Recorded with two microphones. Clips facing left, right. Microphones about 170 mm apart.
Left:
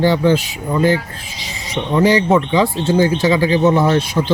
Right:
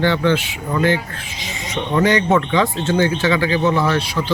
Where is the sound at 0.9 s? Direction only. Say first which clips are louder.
Left 2 dB; 35° left (ahead or behind).